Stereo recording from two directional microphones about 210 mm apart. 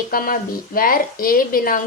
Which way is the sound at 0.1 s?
45° left (ahead or behind).